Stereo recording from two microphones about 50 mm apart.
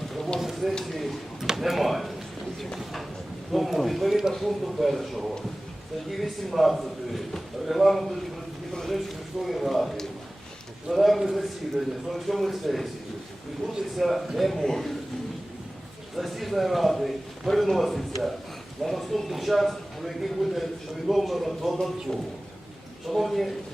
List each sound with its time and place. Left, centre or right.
0.3 s a sound: centre
1.5 s speech: centre
13.9 s speech: centre
16.1 s speech: centre